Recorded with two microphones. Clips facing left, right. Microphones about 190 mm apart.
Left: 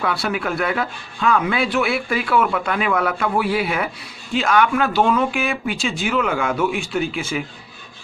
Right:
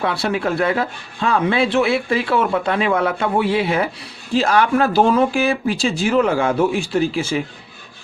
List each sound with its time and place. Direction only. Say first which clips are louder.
0.0 s speech: right 3 dB; 25° right (ahead or behind)